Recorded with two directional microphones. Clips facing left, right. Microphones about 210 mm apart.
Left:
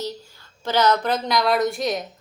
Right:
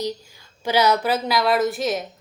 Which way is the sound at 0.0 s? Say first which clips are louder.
Right 3 dB; 10° right (ahead or behind).